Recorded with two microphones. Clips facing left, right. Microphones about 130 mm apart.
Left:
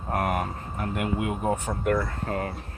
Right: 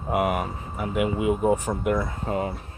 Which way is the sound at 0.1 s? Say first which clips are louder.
Right 3 dB; 10° right (ahead or behind).